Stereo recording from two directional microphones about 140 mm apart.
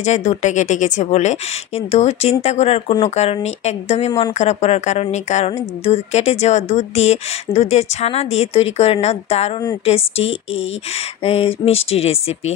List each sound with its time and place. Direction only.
0.0 s a woman's voice: 55° left (ahead or behind)